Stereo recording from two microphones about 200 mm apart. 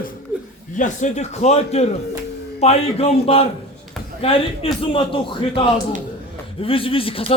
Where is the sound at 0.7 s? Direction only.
35° left (ahead or behind).